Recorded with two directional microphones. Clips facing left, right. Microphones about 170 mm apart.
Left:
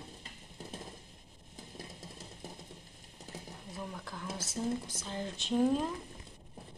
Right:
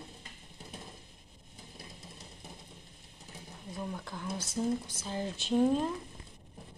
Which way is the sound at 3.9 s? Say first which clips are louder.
Right 3 dB; centre (ahead or behind).